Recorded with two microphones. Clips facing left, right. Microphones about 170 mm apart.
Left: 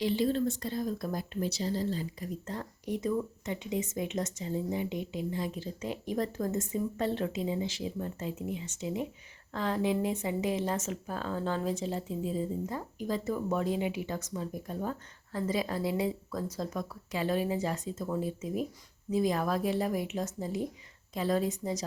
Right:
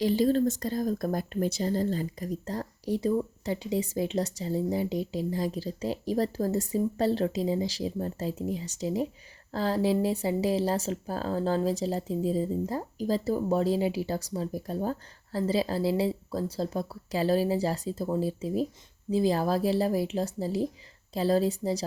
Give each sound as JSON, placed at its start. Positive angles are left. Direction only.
{"t": 0.0, "sound": "speech", "side_deg": -40}